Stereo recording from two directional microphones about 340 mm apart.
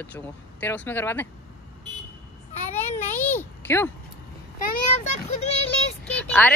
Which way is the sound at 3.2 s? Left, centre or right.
Centre.